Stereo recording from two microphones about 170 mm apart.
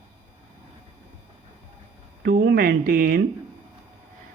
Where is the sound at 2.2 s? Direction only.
65° right (ahead or behind).